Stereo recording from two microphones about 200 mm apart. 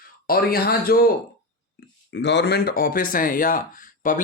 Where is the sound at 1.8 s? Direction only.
50° left (ahead or behind).